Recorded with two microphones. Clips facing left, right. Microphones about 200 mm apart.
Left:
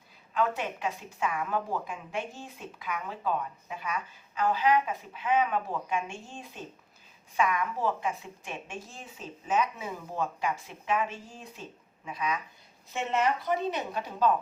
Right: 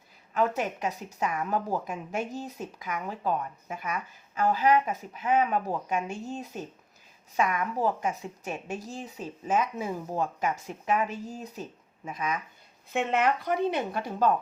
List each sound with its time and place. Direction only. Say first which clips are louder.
0.3 s a woman's voice: right 2 dB; 40° right (ahead or behind)
12.9 s a woman's voice: right 3 dB; 60° right (ahead or behind)
13.9 s a woman's voice: right 1 dB; 45° right (ahead or behind)